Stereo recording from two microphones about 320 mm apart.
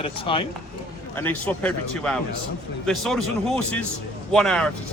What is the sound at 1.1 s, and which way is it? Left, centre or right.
Speech, centre.